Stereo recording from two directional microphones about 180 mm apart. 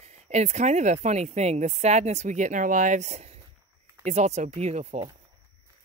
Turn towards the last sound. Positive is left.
turn(degrees=-35)  # may be behind; listen again after turning